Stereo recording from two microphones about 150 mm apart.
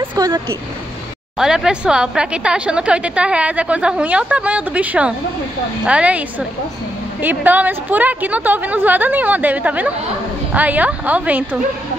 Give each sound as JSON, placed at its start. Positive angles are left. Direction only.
{"t": 0.1, "sound": "speech", "side_deg": -25}
{"t": 1.4, "sound": "a woman's voice", "side_deg": -5}